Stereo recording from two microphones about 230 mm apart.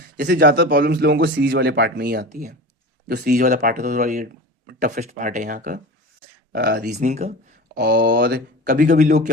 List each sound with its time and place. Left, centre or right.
0.2 s speech: right
7.8 s speech: right
8.6 s speech: right